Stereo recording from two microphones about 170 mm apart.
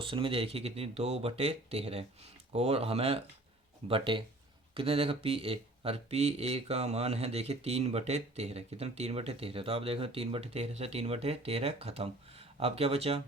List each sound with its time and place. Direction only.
0.0 s speech: 30° right (ahead or behind)